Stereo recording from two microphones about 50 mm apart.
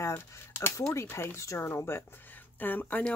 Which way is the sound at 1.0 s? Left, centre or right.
Left.